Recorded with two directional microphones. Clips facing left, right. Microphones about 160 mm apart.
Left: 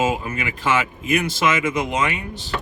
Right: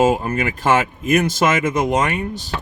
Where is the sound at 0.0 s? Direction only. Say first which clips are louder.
Right 6 dB; 50° right (ahead or behind).